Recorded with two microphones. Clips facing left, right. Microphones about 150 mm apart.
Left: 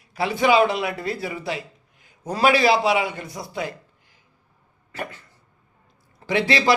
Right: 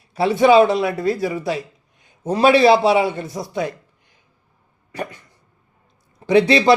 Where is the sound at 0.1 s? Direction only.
25° right (ahead or behind).